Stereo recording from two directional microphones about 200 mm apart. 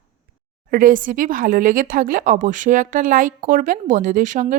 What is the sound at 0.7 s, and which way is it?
Speech, 45° right (ahead or behind).